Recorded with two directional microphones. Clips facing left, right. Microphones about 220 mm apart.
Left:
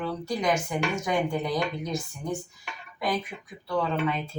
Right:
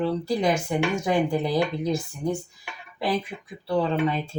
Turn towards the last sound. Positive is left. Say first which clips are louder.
# right 4 dB
turn(degrees=-30)  # may be behind; listen again after turning